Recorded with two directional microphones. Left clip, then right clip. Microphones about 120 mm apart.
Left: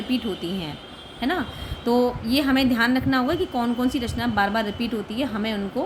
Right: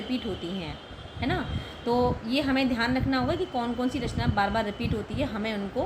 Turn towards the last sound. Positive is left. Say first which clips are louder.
# left 4 dB
turn(degrees=45)  # may be behind; listen again after turning